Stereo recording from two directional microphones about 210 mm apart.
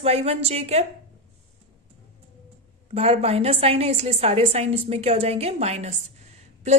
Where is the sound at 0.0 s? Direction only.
30° right (ahead or behind).